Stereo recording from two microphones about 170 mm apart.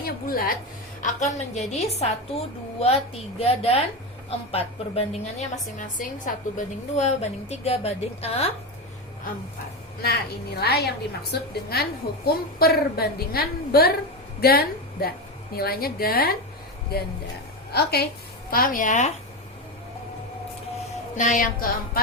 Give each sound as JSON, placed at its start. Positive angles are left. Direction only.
{"t": 0.0, "sound": "a sound", "side_deg": 60}
{"t": 1.0, "sound": "a woman's voice", "side_deg": 45}
{"t": 10.6, "sound": "a woman's voice", "side_deg": 70}
{"t": 17.7, "sound": "a woman's voice", "side_deg": 70}
{"t": 18.5, "sound": "speech", "side_deg": 55}
{"t": 21.2, "sound": "speech", "side_deg": 50}